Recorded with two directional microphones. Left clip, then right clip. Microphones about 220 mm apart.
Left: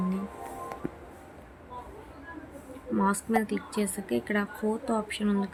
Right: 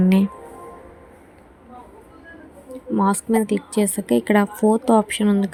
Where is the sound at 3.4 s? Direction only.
25° right (ahead or behind).